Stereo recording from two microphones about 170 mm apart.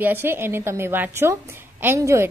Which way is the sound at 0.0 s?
15° right (ahead or behind).